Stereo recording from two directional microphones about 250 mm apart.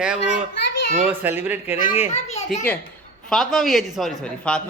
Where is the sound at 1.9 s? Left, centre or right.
Left.